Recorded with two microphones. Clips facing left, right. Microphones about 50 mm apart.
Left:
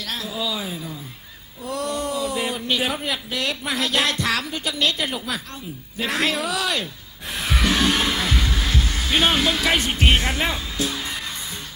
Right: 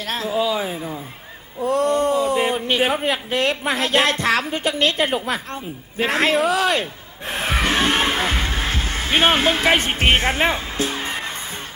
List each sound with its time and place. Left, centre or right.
0.0 s a man's voice: right
7.3 s music: right